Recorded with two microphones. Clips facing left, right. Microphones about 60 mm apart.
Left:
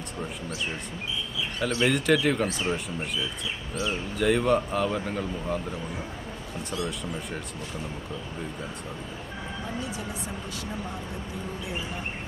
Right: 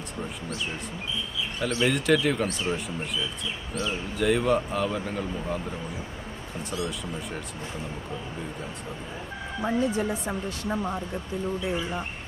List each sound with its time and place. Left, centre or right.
1.6 s speech: centre
6.7 s speech: centre
9.6 s speech: right